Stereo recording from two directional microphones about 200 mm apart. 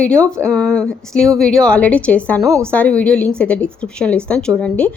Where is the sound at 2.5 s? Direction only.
15° right (ahead or behind).